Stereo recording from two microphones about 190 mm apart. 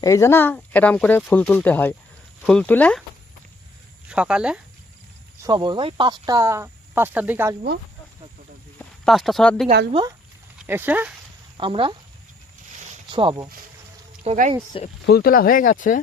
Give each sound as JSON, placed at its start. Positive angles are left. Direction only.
{"t": 0.0, "sound": "speech", "side_deg": 15}
{"t": 4.1, "sound": "speech", "side_deg": -5}
{"t": 5.4, "sound": "speech", "side_deg": -20}
{"t": 9.0, "sound": "speech", "side_deg": 0}
{"t": 9.9, "sound": "speech", "side_deg": -25}
{"t": 10.7, "sound": "speech", "side_deg": -10}
{"t": 11.5, "sound": "speech", "side_deg": -25}
{"t": 13.1, "sound": "speech", "side_deg": -25}
{"t": 14.3, "sound": "speech", "side_deg": -40}
{"t": 15.0, "sound": "speech", "side_deg": 55}